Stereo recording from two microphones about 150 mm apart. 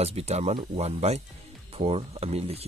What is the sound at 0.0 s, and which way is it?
Speech, 45° right (ahead or behind).